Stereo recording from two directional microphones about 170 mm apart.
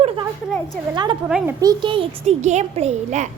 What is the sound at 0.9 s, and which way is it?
Speech, 25° right (ahead or behind).